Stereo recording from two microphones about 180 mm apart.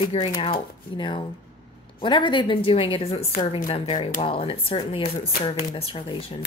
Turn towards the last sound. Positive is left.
turn(degrees=30)  # may be behind; listen again after turning